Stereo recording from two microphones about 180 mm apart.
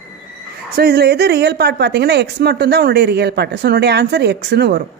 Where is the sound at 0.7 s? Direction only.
60° right (ahead or behind).